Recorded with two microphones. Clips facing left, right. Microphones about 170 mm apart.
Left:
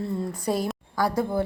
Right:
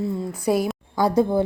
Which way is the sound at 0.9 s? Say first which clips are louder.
Right 6 dB; 20° right (ahead or behind).